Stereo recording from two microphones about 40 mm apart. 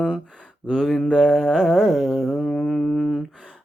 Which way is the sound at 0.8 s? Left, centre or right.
Centre.